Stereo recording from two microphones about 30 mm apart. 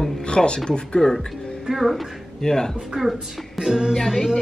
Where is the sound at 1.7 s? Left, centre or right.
Centre.